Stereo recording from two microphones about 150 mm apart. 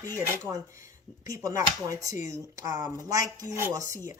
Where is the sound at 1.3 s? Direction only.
20° right (ahead or behind).